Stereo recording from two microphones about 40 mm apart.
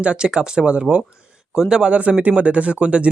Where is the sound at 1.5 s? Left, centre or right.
Centre.